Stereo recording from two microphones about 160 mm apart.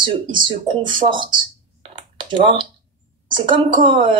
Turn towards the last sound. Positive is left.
turn(degrees=-30)  # may be behind; listen again after turning